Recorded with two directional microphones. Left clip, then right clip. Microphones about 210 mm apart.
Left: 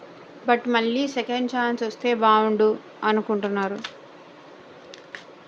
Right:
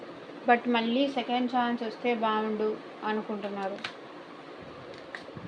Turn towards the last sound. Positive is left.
turn(degrees=40)  # may be behind; listen again after turning